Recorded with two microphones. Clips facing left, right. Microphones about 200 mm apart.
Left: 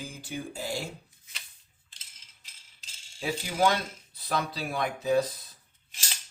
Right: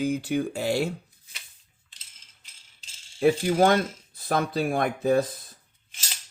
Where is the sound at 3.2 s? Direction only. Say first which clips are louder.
Right 7 dB; 55° right (ahead or behind).